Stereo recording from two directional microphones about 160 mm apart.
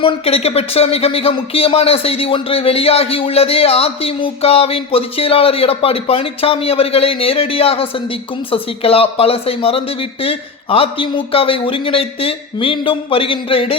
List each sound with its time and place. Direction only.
0.0 s speech: 40° left (ahead or behind)